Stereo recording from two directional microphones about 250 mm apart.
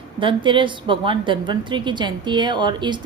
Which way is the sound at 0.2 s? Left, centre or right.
Centre.